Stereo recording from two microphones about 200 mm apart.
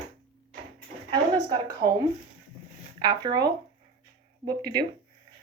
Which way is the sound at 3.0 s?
20° right (ahead or behind).